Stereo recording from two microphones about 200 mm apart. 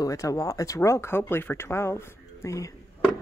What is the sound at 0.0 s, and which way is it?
Speech, 15° left (ahead or behind).